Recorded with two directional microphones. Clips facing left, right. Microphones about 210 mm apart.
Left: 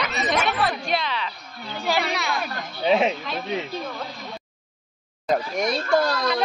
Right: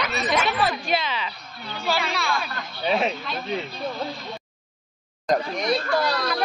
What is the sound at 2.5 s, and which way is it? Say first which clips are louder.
Speech: left 4 dB; 15° left (ahead or behind).